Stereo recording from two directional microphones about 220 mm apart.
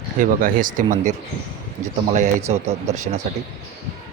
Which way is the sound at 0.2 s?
35° right (ahead or behind).